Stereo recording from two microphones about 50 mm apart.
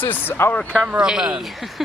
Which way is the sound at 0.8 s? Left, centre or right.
Centre.